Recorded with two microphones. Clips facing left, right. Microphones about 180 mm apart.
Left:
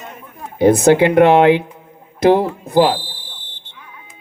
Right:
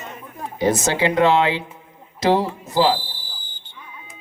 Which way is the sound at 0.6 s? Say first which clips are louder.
Left 9 dB; 55° left (ahead or behind).